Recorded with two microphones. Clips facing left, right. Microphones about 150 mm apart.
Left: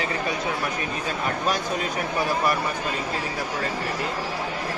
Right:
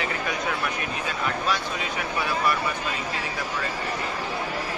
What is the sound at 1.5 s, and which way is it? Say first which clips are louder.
A man's voice: left 2 dB; 40° left (ahead or behind).